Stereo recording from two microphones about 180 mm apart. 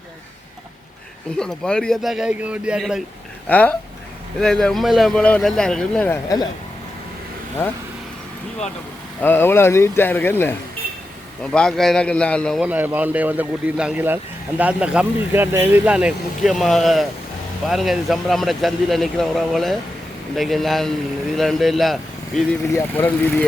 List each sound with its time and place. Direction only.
1.4 s speech: 5° left (ahead or behind)
3.5 s speech: 10° left (ahead or behind)
6.2 s speech: 20° left (ahead or behind)
9.2 s speech: 10° left (ahead or behind)
11.5 s speech: 5° left (ahead or behind)
12.6 s speech: 10° right (ahead or behind)
22.7 s speech: 10° left (ahead or behind)